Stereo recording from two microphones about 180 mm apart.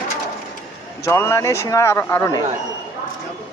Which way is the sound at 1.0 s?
15° left (ahead or behind).